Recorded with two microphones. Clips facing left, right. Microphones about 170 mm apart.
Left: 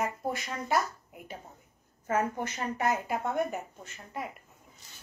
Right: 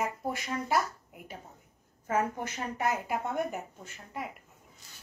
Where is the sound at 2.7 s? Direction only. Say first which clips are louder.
Left 1 dB; 5° right (ahead or behind).